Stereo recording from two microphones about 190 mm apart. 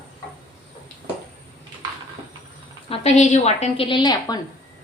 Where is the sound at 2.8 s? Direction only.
35° left (ahead or behind).